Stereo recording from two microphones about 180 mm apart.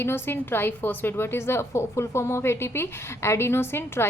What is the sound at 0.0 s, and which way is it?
A woman's voice, 15° left (ahead or behind).